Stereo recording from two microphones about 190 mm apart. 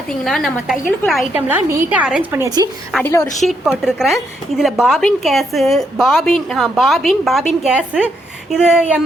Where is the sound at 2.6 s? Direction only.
20° right (ahead or behind).